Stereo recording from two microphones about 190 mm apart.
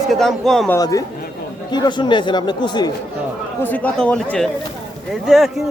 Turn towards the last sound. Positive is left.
turn(degrees=0)  # may be behind; listen again after turning